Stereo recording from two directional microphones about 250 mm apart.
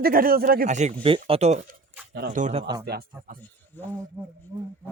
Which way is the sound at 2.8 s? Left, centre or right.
Right.